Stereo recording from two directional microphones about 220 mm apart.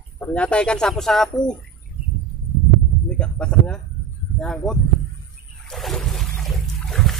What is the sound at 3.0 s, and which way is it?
Speech, 5° left (ahead or behind).